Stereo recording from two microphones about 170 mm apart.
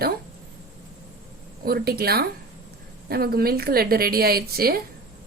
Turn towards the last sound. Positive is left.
turn(degrees=-65)  # may be behind; listen again after turning